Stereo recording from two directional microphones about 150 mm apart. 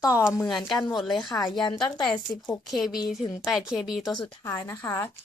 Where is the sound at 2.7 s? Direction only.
Centre (ahead or behind).